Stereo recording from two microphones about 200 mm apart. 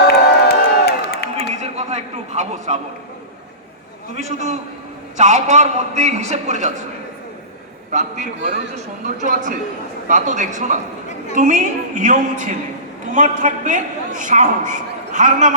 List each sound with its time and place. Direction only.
0.1 s crowd: 55° left (ahead or behind)
1.5 s a sound: 35° right (ahead or behind)
4.1 s a man's voice: 35° right (ahead or behind)
7.9 s a man's voice: 35° right (ahead or behind)